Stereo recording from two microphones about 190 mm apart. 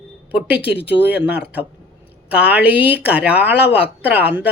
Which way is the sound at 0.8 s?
65° left (ahead or behind).